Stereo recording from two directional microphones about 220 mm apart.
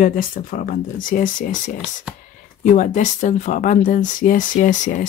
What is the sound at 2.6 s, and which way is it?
Speech, 35° left (ahead or behind).